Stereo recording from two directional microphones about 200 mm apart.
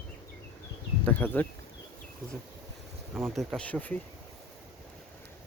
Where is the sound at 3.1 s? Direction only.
10° right (ahead or behind).